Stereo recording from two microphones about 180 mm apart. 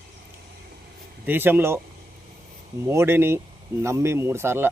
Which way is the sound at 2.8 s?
15° right (ahead or behind).